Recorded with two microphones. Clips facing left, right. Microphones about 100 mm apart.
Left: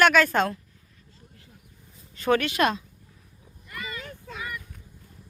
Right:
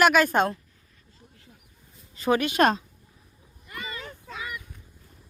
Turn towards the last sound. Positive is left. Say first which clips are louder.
# even
turn(degrees=-25)  # may be behind; listen again after turning